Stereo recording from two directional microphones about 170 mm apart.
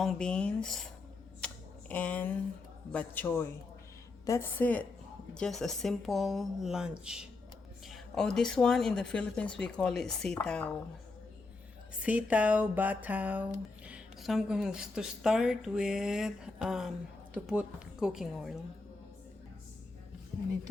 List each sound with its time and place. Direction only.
0.0 s speech: 5° left (ahead or behind)
1.4 s typing: 5° left (ahead or behind)
1.9 s a man's voice: 10° left (ahead or behind)
12.0 s speech: 10° right (ahead or behind)